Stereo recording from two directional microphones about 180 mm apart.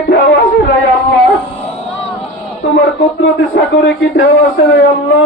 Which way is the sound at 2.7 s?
90° left.